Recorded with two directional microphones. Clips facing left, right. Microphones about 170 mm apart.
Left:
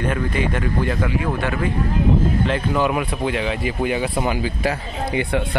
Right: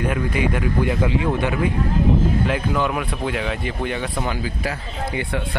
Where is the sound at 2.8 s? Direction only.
5° left (ahead or behind).